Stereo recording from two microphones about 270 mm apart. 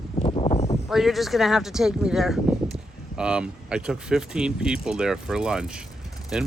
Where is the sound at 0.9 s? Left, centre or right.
Centre.